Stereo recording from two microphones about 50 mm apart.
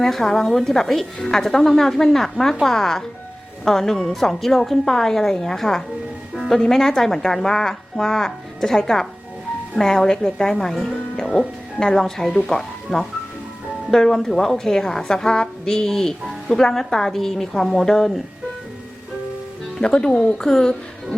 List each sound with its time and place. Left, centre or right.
0.0 s a woman's voice: centre
6.3 s music: centre
6.6 s a woman's voice: centre
19.8 s a woman's voice: centre